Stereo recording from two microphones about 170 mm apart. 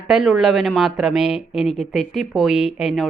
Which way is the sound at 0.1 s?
Centre (ahead or behind).